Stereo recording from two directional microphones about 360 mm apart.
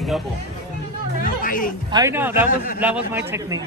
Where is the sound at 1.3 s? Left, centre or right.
Left.